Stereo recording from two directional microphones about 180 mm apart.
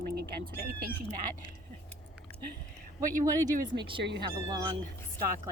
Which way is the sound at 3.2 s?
20° right (ahead or behind).